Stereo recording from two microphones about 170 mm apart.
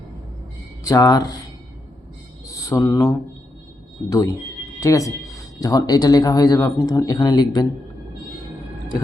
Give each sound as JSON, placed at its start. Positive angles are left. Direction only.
{"t": 0.9, "sound": "speech", "side_deg": 20}
{"t": 2.5, "sound": "mantra", "side_deg": 20}
{"t": 4.1, "sound": "speech", "side_deg": 20}